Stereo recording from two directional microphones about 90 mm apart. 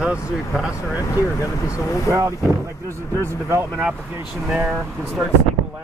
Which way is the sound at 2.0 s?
35° right (ahead or behind).